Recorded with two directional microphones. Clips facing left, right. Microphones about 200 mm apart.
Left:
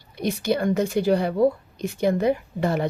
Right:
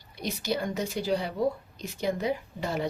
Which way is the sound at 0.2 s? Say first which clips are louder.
Left 7 dB; 55° left (ahead or behind).